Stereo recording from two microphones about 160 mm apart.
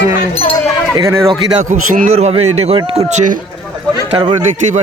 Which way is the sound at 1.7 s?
45° right (ahead or behind).